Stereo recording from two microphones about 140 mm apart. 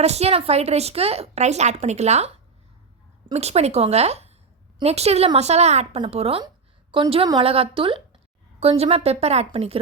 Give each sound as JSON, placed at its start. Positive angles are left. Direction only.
{"t": 0.0, "sound": "a woman's voice", "side_deg": -50}
{"t": 3.3, "sound": "a woman's voice", "side_deg": -50}